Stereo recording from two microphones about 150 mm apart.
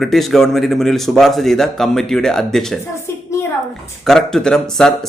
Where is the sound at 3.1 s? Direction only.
15° left (ahead or behind).